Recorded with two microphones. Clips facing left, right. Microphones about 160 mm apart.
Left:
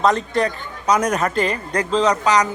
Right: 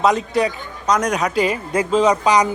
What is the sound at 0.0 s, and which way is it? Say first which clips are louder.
Speech: right 1 dB; 5° right (ahead or behind).